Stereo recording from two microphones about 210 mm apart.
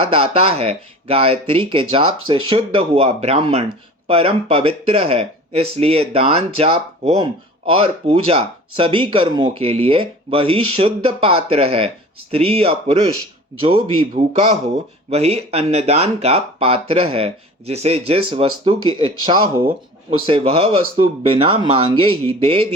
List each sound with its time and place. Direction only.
0.1 s speech: 25° right (ahead or behind)